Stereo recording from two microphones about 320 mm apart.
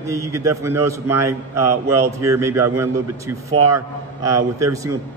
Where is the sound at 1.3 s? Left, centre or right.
Right.